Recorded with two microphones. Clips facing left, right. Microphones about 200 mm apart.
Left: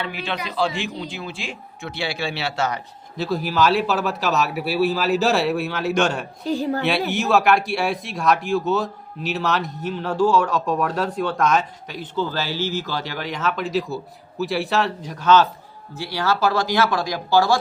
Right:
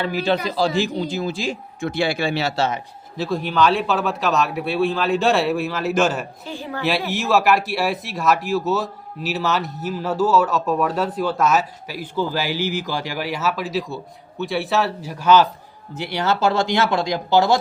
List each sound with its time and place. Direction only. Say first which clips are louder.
0.0 s a man's voice: right 7 dB; 40° right (ahead or behind)
2.6 s speech: right 2 dB; 25° right (ahead or behind)
3.2 s speech: right 1 dB; centre (ahead or behind)
6.5 s a woman's voice: left 9 dB; 40° left (ahead or behind)
6.8 s speech: left 1 dB; centre (ahead or behind)
16.0 s speech: right 1 dB; 20° right (ahead or behind)